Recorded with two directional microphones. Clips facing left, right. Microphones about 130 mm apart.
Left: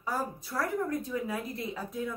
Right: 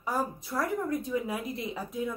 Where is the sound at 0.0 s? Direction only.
15° right (ahead or behind).